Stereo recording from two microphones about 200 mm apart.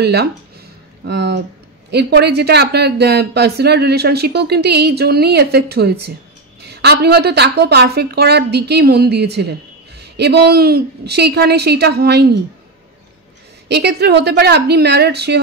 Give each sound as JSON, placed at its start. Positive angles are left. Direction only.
{"t": 0.0, "sound": "a woman's voice", "side_deg": -55}
{"t": 13.7, "sound": "a woman's voice", "side_deg": -55}